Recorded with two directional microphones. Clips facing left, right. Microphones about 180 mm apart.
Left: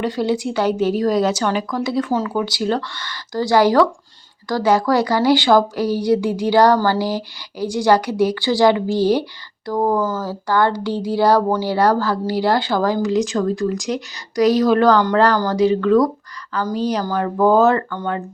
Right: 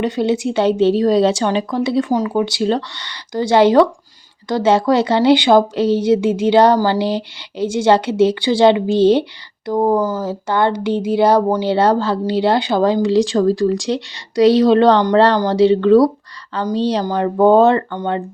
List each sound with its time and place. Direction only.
0.0 s a woman's voice: 25° right (ahead or behind)